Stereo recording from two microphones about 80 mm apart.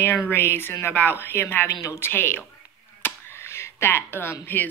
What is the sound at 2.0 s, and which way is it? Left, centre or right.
Speech, left.